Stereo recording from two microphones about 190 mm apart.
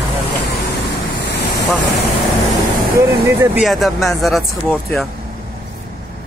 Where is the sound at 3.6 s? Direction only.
Centre (ahead or behind).